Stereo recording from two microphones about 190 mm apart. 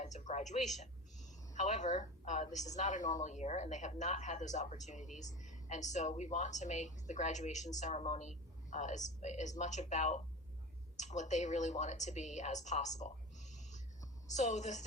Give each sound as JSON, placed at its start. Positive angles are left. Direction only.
{"t": 0.0, "sound": "a man's voice", "side_deg": 40}